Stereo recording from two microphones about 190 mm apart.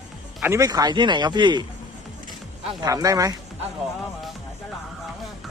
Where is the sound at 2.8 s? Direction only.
20° right (ahead or behind).